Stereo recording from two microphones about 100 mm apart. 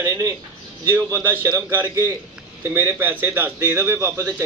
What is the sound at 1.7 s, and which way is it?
A man's voice, 25° right (ahead or behind).